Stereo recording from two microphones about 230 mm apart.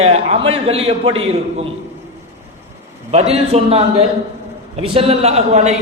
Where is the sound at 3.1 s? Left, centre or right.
Right.